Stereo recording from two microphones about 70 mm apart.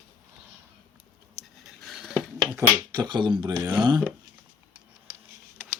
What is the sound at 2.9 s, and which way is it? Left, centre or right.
Speech, right.